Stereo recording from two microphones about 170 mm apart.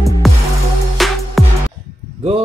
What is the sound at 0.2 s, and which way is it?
Music, centre (ahead or behind).